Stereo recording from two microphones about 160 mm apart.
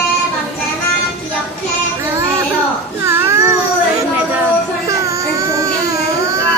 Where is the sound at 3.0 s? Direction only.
15° right (ahead or behind).